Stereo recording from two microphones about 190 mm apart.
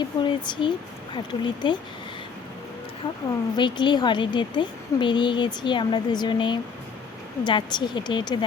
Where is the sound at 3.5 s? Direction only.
25° left (ahead or behind).